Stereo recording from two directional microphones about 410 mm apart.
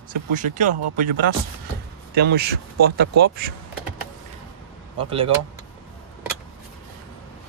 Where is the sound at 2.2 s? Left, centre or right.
Right.